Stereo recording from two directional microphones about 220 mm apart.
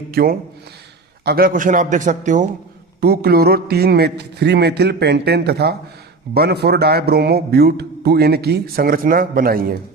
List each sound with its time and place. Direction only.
0.1 s a man's voice: 45° right (ahead or behind)